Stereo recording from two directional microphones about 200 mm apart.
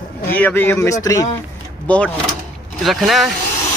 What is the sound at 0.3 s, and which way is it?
Speech, 10° left (ahead or behind).